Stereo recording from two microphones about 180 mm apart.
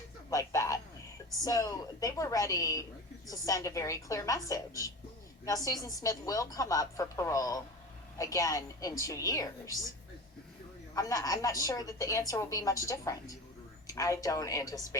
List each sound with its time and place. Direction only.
0.3 s a sound: 20° left (ahead or behind)
1.5 s a woman's voice: 20° left (ahead or behind)
10.9 s a woman's voice: 20° left (ahead or behind)